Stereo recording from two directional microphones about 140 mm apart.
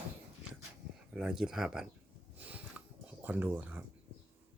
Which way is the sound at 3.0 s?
10° right (ahead or behind).